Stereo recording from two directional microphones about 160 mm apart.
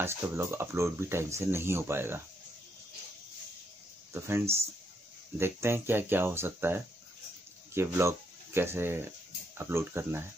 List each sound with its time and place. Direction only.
0.0 s speech: 15° right (ahead or behind)
4.1 s speech: 15° right (ahead or behind)